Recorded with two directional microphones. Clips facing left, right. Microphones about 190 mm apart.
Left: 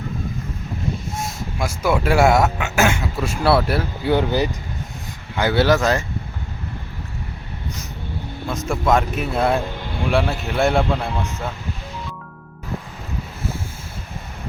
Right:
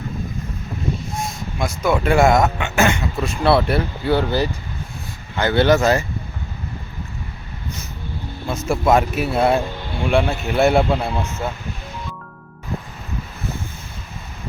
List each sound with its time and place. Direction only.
1.5 s speech: 5° left (ahead or behind)
4.1 s speech: 15° left (ahead or behind); by 6.1 s 5° right (ahead or behind)
8.4 s speech: 5° right (ahead or behind)